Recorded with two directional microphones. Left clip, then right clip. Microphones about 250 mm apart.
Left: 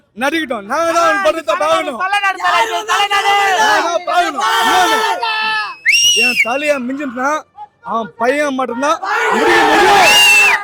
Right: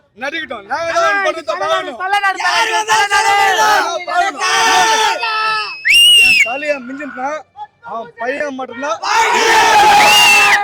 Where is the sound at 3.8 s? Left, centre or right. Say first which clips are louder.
Left 2 dB; left.